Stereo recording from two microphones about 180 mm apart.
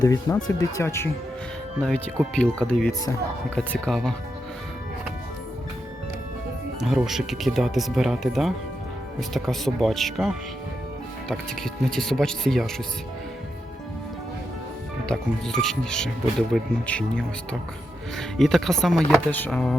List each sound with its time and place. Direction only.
0.0 s speech: 20° left (ahead or behind); by 4.1 s centre (ahead or behind)
6.7 s speech: 5° right (ahead or behind)
15.0 s speech: 5° left (ahead or behind)